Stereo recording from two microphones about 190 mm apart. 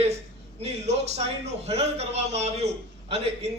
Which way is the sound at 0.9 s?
35° right (ahead or behind).